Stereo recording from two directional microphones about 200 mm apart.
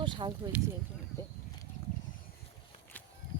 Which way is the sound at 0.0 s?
25° right (ahead or behind).